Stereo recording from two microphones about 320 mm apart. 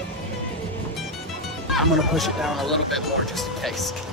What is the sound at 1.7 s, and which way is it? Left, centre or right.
Speech, centre.